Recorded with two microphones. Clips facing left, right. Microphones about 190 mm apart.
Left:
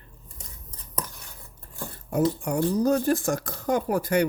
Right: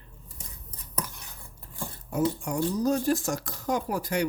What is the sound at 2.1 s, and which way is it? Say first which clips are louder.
Speech: left 3 dB; 60° left (ahead or behind).